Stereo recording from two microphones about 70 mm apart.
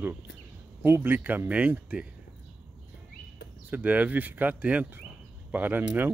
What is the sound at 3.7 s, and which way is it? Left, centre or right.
Speech, right.